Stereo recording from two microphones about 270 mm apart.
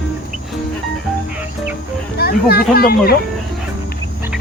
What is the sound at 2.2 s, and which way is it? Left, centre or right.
Speech, left.